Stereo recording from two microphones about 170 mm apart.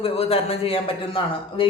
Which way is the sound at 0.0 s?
35° left (ahead or behind).